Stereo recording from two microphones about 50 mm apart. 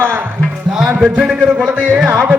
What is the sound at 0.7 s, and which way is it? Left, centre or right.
A man's voice, centre.